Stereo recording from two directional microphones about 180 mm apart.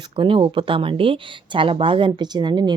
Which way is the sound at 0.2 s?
30° right (ahead or behind).